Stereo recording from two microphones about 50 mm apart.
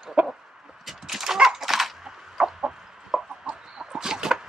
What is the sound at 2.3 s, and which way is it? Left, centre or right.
Chicken, centre.